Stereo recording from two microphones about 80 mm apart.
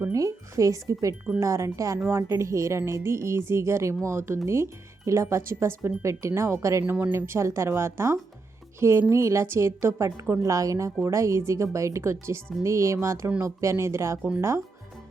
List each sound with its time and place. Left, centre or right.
0.1 s speech: right